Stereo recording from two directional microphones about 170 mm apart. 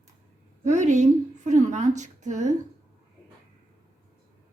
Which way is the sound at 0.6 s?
45° right (ahead or behind).